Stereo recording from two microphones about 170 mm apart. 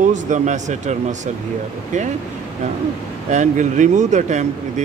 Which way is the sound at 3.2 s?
45° right (ahead or behind).